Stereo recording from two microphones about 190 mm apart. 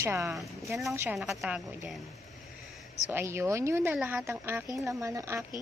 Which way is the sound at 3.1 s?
15° right (ahead or behind).